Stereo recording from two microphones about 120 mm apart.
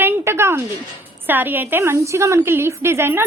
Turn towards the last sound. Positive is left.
turn(degrees=-20)  # may be behind; listen again after turning